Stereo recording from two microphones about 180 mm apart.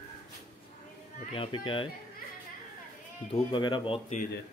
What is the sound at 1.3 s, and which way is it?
Speech, 30° left (ahead or behind).